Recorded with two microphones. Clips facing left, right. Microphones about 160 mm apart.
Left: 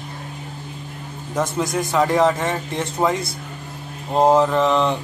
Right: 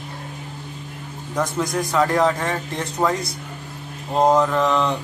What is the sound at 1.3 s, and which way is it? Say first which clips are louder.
A man's voice: left 1 dB; 5° left (ahead or behind).